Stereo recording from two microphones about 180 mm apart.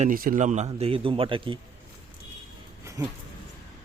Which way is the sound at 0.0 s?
50° right (ahead or behind).